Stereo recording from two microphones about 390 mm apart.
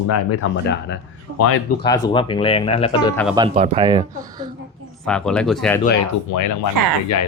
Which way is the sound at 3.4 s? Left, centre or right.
Centre.